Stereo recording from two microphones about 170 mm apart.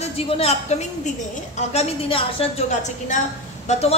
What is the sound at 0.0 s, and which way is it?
A woman's voice, 40° left (ahead or behind).